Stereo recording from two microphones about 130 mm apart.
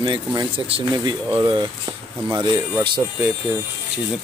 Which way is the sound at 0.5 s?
45° right (ahead or behind).